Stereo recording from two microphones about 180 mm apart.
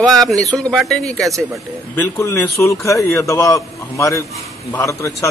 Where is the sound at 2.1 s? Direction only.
20° left (ahead or behind).